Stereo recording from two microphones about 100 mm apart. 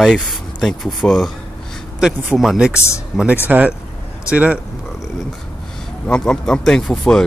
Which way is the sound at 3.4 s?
15° right (ahead or behind).